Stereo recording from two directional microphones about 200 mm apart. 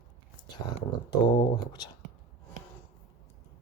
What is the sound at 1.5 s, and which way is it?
Speech, 20° left (ahead or behind).